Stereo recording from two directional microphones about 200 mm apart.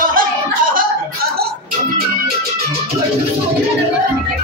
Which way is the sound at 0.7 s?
50° right (ahead or behind).